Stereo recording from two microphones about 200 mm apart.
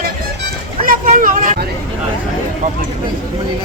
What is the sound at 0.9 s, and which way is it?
Vehicle, 45° right (ahead or behind).